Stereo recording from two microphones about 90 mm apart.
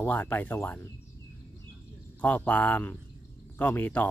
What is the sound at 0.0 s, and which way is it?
Speech, 20° left (ahead or behind).